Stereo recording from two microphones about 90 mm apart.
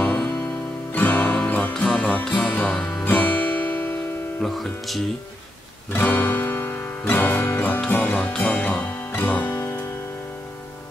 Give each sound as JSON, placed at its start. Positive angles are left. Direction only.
{"t": 0.9, "sound": "music", "side_deg": 20}
{"t": 4.4, "sound": "speech", "side_deg": 0}
{"t": 5.9, "sound": "music", "side_deg": 20}